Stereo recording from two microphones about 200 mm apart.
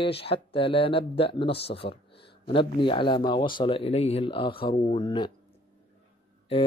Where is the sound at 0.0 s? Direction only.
30° left (ahead or behind).